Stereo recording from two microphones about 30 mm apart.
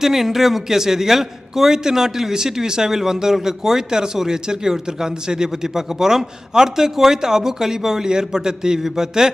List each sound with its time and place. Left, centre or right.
0.0 s a man's voice: centre